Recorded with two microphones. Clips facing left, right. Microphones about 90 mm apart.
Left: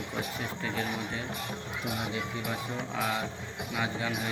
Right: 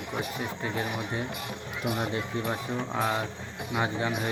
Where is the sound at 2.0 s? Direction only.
35° right (ahead or behind).